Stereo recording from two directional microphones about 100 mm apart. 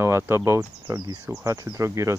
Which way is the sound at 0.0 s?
25° right (ahead or behind).